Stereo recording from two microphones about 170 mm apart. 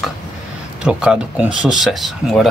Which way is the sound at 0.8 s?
5° right (ahead or behind).